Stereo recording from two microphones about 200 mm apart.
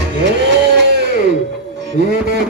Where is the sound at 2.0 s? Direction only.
60° right (ahead or behind).